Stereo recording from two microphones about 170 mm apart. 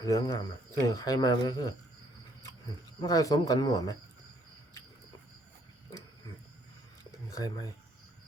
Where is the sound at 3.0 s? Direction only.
20° left (ahead or behind).